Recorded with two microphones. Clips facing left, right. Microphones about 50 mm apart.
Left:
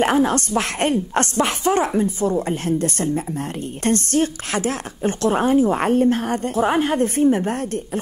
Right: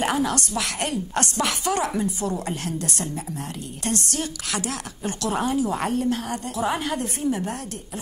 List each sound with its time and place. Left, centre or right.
0.0 s a woman's voice: left